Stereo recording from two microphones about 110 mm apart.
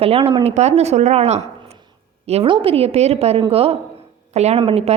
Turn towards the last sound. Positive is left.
turn(degrees=-60)  # may be behind; listen again after turning